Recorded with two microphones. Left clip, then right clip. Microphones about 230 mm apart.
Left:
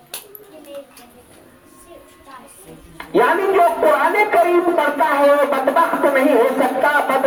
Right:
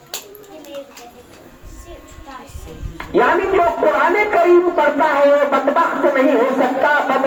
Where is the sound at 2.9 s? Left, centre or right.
Left.